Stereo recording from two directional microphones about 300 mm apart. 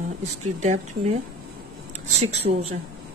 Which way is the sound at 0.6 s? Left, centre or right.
Right.